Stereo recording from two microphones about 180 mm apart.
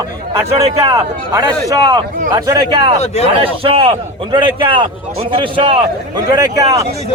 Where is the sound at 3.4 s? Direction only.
30° right (ahead or behind).